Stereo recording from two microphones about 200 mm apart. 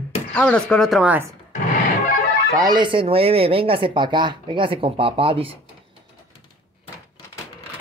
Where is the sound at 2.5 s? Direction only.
20° right (ahead or behind).